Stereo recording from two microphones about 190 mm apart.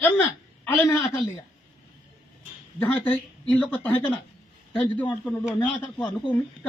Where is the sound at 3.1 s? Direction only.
10° left (ahead or behind).